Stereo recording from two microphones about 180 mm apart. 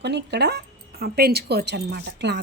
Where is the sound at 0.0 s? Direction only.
70° right (ahead or behind).